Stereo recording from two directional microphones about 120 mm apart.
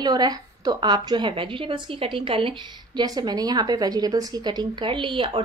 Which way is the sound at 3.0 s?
35° right (ahead or behind).